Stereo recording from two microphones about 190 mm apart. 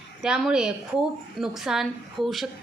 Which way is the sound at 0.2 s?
Centre (ahead or behind).